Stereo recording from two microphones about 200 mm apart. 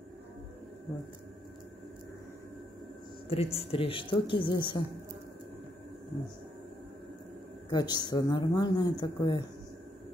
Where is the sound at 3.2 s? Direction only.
30° left (ahead or behind).